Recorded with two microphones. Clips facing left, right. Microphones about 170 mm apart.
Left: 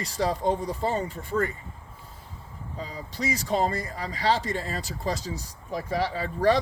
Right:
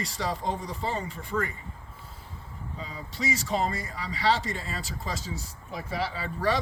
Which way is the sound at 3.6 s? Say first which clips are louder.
Left 3 dB; 40° left (ahead or behind).